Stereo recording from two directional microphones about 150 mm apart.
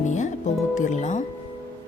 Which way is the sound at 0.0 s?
55° left (ahead or behind).